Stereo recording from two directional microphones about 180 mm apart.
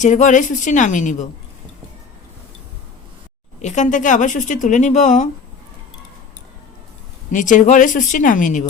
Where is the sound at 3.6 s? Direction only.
40° left (ahead or behind).